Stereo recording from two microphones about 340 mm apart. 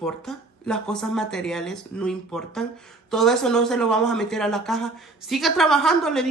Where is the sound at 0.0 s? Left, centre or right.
Centre.